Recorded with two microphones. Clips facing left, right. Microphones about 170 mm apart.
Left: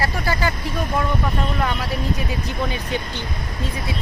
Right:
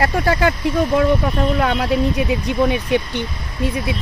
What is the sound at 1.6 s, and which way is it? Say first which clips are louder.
Speech: right 6 dB; 65° right (ahead or behind).